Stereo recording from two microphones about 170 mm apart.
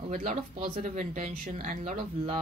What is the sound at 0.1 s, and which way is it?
Speech, 45° right (ahead or behind).